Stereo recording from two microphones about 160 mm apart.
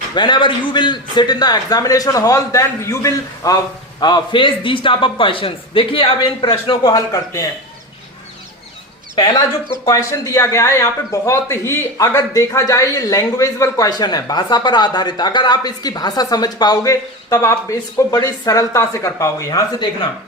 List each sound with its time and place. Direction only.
0.1 s a man's voice: 30° left (ahead or behind)
9.8 s speech: 20° left (ahead or behind)